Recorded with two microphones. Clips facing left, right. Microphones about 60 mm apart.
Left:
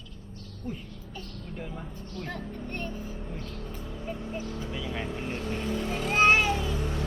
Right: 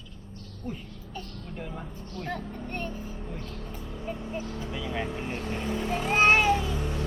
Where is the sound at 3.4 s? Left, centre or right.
Centre.